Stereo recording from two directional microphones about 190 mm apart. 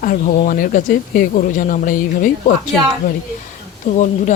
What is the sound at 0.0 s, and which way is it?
A woman's voice, 45° left (ahead or behind).